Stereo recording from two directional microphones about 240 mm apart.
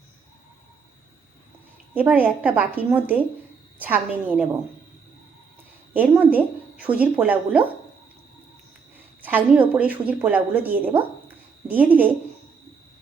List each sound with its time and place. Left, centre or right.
1.9 s a woman's voice: centre
5.9 s a woman's voice: centre
9.2 s a woman's voice: centre